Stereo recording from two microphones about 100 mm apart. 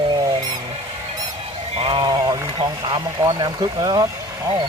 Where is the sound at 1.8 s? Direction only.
60° right (ahead or behind); by 2.4 s 40° right (ahead or behind).